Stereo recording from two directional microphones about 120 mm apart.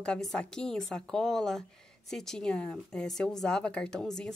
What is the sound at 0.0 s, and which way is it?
A woman's voice, 5° left (ahead or behind).